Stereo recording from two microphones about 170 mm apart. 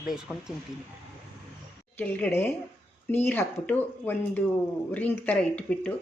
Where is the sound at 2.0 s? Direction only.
10° left (ahead or behind).